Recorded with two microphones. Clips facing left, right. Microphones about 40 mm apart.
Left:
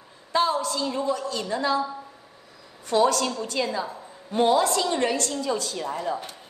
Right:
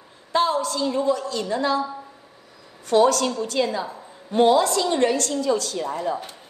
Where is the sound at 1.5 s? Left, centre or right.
Right.